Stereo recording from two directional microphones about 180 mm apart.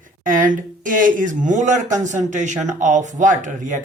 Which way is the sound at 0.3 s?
50° right (ahead or behind).